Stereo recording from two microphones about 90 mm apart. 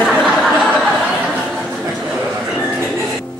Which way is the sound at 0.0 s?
Centre (ahead or behind).